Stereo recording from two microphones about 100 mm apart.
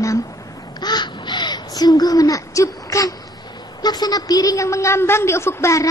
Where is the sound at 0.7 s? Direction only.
45° left (ahead or behind).